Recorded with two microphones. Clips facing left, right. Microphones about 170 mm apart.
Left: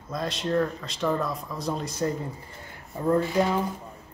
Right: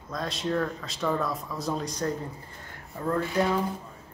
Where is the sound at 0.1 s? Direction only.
Centre (ahead or behind).